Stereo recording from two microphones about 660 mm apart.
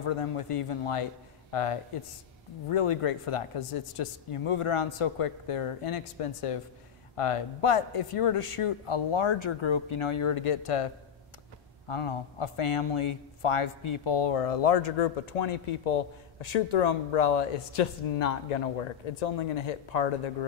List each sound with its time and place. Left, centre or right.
0.0 s speech: left
11.9 s speech: left